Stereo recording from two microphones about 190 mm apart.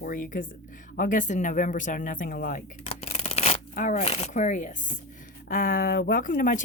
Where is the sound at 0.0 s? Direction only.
45° left (ahead or behind).